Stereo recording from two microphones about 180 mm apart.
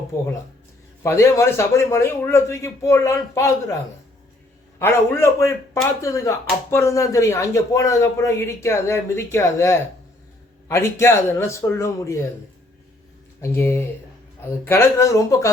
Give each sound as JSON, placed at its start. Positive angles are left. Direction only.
{"t": 1.0, "sound": "speech", "side_deg": 15}
{"t": 4.8, "sound": "speech", "side_deg": 15}
{"t": 13.4, "sound": "speech", "side_deg": 15}